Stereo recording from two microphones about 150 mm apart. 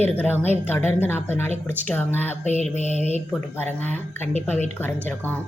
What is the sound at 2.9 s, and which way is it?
Speech, 50° left (ahead or behind).